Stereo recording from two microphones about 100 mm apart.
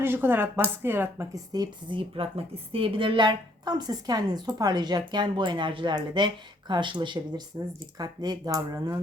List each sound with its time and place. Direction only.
0.0 s speech: 20° right (ahead or behind)
1.5 s a woman's voice: 55° right (ahead or behind)
7.9 s speech: 40° right (ahead or behind)